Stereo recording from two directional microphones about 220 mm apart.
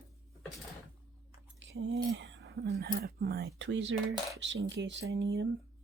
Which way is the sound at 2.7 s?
45° right (ahead or behind).